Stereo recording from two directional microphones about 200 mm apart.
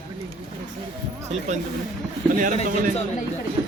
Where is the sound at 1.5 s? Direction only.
35° right (ahead or behind).